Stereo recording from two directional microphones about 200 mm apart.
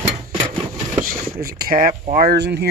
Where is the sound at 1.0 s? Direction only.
45° right (ahead or behind).